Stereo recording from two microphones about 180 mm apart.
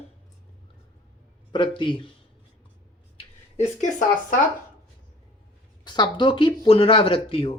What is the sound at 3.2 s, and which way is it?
Speech, 40° left (ahead or behind).